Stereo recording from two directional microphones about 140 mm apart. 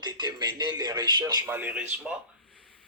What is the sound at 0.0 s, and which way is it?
Speech, 30° right (ahead or behind).